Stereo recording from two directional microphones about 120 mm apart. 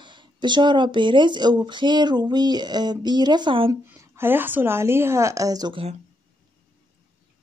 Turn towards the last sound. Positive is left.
turn(degrees=-30)  # may be behind; listen again after turning